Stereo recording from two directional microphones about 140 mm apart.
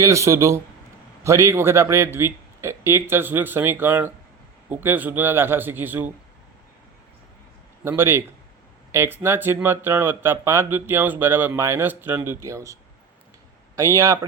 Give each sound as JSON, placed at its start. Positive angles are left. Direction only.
{"t": 0.0, "sound": "speech", "side_deg": -20}
{"t": 7.9, "sound": "speech", "side_deg": -15}
{"t": 13.7, "sound": "speech", "side_deg": -20}